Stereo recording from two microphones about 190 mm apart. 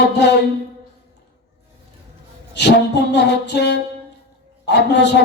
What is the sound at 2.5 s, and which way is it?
A man's voice, 65° left (ahead or behind).